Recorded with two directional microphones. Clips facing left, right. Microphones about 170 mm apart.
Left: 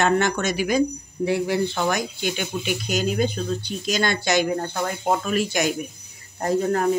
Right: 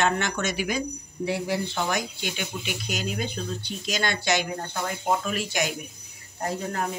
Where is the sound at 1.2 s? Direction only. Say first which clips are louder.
Left 5 dB; 55° left (ahead or behind).